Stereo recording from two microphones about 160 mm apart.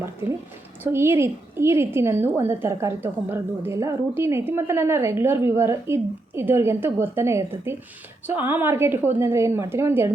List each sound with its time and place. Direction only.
0.0 s a woman's voice: 15° right (ahead or behind)